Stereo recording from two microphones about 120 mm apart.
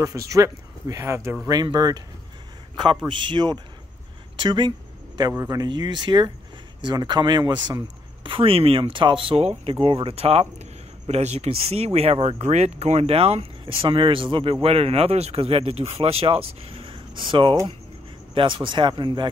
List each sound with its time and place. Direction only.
0.0 s speech: 25° right (ahead or behind)
1.5 s speech: 35° right (ahead or behind)
3.1 s speech: 40° right (ahead or behind)
4.4 s a sound: 40° right (ahead or behind)
5.4 s speech: 30° right (ahead or behind)